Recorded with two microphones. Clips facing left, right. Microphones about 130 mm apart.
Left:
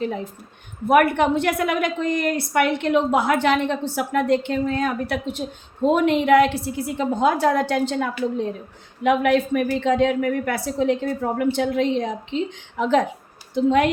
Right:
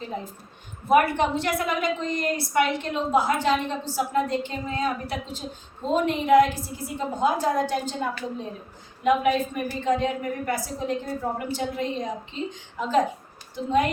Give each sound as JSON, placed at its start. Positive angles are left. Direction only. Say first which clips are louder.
{"t": 0.9, "sound": "a woman's voice", "louder": "left 3 dB", "side_deg": 60}